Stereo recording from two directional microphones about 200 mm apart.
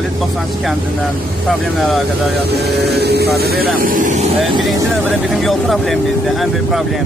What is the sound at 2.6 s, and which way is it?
Speech, 55° right (ahead or behind).